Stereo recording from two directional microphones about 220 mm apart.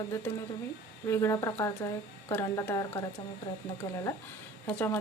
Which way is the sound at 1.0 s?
10° left (ahead or behind).